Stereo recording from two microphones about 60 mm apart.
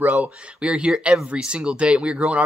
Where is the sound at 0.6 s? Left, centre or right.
Centre.